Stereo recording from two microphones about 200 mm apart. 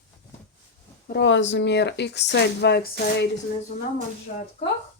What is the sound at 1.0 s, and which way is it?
Speech, 65° left (ahead or behind).